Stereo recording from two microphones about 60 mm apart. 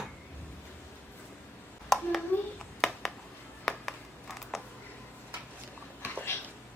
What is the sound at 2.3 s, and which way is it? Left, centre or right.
Clapping, left.